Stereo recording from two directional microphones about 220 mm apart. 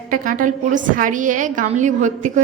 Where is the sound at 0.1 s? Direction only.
40° right (ahead or behind).